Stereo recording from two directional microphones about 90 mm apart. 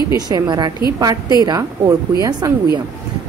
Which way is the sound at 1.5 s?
35° right (ahead or behind).